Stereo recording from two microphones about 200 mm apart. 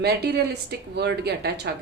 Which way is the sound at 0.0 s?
55° right (ahead or behind).